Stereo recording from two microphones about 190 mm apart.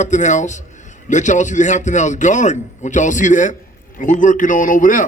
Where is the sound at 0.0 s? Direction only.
40° left (ahead or behind).